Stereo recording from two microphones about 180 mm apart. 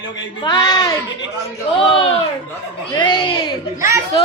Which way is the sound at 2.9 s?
25° left (ahead or behind).